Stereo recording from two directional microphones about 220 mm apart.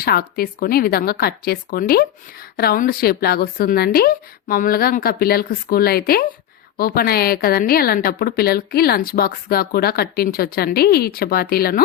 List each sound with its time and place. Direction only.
0.0 s speech: 45° left (ahead or behind)